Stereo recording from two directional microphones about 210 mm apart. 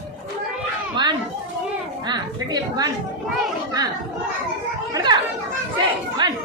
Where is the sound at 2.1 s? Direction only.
20° right (ahead or behind).